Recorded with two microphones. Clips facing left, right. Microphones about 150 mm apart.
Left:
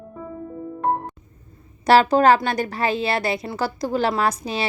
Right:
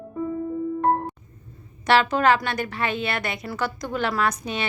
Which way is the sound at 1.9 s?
35° left (ahead or behind).